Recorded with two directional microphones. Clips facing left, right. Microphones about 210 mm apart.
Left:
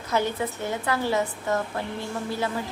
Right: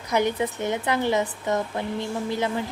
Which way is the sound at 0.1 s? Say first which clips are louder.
Right 3 dB; 15° right (ahead or behind).